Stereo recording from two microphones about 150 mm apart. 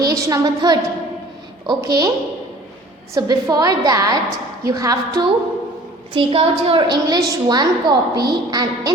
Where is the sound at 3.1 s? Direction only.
25° right (ahead or behind).